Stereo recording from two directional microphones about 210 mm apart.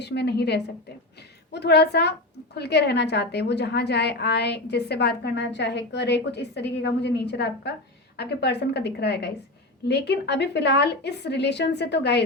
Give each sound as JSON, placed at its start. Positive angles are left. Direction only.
{"t": 0.0, "sound": "a woman's voice", "side_deg": 50}